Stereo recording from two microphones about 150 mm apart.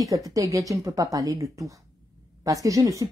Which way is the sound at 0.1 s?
20° right (ahead or behind).